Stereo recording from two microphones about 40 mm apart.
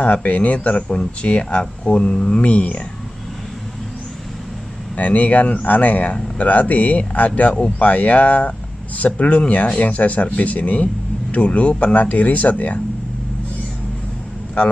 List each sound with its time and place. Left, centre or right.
0.0 s speech: left
2.4 s speech: left
4.9 s speech: left